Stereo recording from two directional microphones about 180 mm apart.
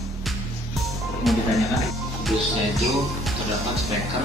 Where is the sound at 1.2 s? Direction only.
Centre (ahead or behind).